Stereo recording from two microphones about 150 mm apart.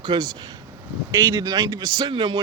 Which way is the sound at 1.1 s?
20° right (ahead or behind).